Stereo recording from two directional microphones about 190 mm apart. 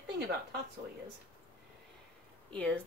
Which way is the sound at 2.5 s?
5° left (ahead or behind).